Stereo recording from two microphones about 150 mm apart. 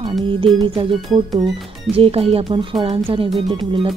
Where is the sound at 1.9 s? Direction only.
40° right (ahead or behind).